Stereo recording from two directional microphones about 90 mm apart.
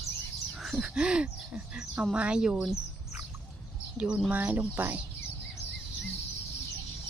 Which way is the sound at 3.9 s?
10° right (ahead or behind).